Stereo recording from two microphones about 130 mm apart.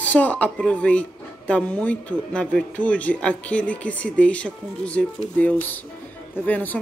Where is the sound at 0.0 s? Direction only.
10° left (ahead or behind).